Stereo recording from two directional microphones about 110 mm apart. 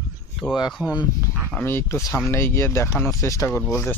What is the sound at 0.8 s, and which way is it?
Speech, 35° left (ahead or behind).